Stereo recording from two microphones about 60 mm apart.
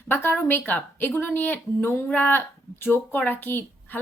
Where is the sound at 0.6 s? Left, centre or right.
Left.